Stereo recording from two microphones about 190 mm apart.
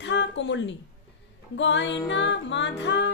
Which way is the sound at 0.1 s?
70° left (ahead or behind).